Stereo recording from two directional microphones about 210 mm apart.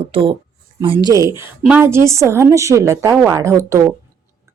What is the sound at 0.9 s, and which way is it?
A woman's voice, 15° right (ahead or behind).